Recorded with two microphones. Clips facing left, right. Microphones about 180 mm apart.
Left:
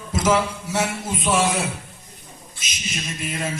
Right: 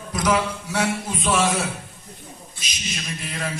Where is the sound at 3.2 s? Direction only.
20° left (ahead or behind).